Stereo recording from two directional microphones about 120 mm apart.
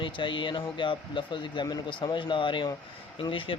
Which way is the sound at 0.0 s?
45° left (ahead or behind).